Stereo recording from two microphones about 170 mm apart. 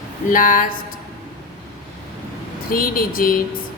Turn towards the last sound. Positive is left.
turn(degrees=55)  # may be behind; listen again after turning